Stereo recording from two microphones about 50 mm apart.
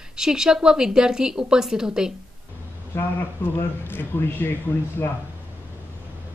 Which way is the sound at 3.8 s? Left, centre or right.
Left.